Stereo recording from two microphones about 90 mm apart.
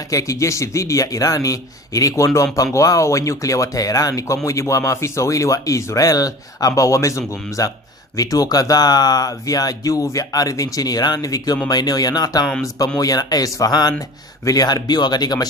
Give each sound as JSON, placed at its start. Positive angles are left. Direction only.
{"t": 0.1, "sound": "speech", "side_deg": 40}